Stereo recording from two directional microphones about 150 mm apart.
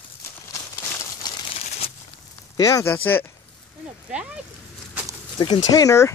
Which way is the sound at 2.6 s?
25° left (ahead or behind).